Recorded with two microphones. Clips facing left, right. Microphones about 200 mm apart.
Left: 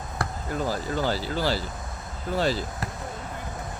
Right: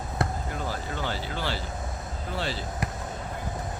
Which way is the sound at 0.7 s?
40° left (ahead or behind).